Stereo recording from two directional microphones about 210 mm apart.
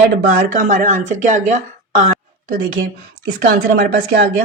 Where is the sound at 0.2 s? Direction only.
45° right (ahead or behind).